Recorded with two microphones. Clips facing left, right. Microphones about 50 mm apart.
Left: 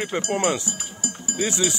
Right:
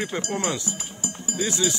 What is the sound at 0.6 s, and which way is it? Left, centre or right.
Music, right.